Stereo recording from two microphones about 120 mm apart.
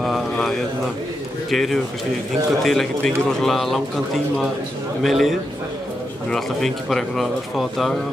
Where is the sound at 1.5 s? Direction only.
Centre (ahead or behind).